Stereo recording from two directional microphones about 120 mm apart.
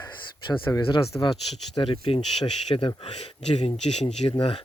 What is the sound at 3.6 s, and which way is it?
Speech, 70° left (ahead or behind).